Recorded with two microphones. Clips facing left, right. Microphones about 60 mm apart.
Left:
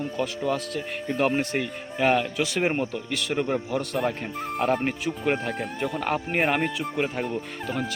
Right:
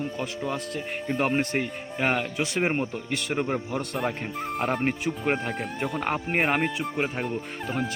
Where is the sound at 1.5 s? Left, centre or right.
Right.